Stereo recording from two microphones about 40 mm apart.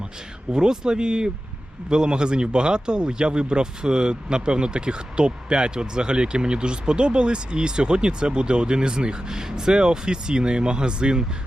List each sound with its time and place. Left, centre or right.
0.5 s speech: centre